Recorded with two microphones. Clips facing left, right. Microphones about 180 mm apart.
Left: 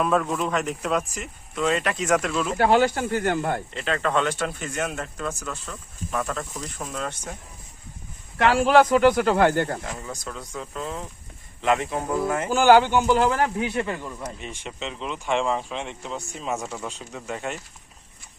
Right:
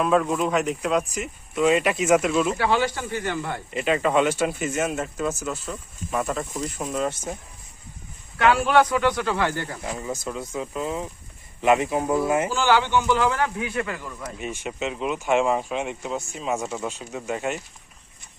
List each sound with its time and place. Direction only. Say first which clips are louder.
0.0 s speech: right 2 dB; centre (ahead or behind)
2.6 s speech: left 4 dB; 50° left (ahead or behind)
3.7 s speech: right 3 dB; 10° right (ahead or behind)
8.6 s speech: left 3 dB; 45° left (ahead or behind)
9.8 s speech: right 4 dB; 5° right (ahead or behind)
12.5 s speech: left 5 dB; 50° left (ahead or behind); by 14.3 s 20° left (ahead or behind)
14.3 s speech: right 5 dB; 10° right (ahead or behind)